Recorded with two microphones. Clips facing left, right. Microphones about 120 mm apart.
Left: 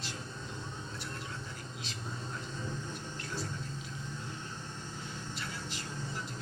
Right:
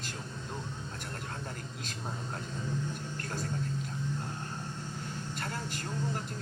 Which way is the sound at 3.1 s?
50° right (ahead or behind).